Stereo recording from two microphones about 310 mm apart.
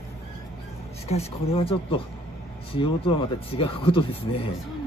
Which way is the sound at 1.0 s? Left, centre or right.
Centre.